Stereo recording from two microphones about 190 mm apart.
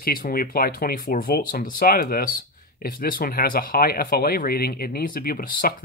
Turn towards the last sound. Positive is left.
turn(degrees=45)  # may be behind; listen again after turning